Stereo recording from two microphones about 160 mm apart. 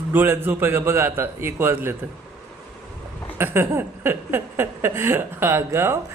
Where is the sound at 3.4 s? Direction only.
15° right (ahead or behind).